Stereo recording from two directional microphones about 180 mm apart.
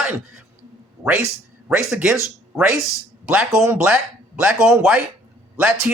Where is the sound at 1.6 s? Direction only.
5° right (ahead or behind).